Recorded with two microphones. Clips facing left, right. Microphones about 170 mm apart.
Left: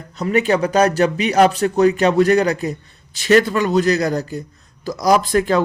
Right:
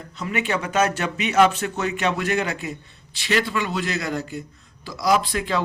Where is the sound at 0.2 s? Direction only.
40° left (ahead or behind).